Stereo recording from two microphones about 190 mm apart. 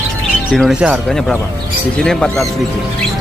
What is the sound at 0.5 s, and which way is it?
Speech, centre (ahead or behind).